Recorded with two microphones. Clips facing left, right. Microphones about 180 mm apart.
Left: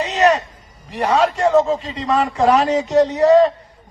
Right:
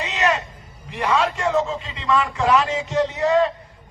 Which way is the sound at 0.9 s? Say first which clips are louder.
Left 4 dB; 40° left (ahead or behind).